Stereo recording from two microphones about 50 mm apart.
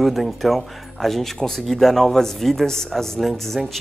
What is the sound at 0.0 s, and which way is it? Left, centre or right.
Speech, centre.